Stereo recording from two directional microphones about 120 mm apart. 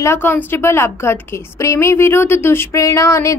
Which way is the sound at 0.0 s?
20° left (ahead or behind).